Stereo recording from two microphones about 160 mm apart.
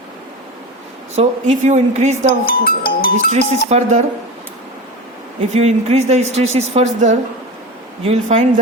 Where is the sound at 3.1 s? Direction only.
45° right (ahead or behind).